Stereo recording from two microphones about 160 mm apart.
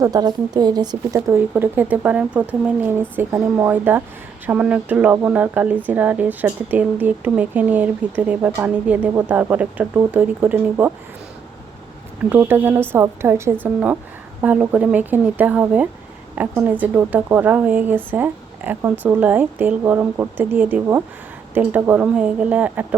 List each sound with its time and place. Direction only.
0.0 s speech: 25° right (ahead or behind)
1.4 s speech: 10° right (ahead or behind)
12.3 s speech: 10° right (ahead or behind)